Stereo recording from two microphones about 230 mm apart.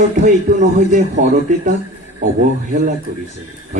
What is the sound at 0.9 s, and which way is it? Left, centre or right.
Speech, right.